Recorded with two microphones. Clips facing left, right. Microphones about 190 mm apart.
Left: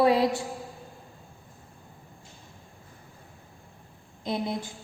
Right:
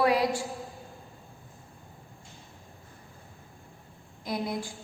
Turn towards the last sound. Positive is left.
turn(degrees=25)  # may be behind; listen again after turning